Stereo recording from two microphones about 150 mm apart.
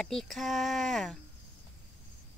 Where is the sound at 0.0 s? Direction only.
5° left (ahead or behind).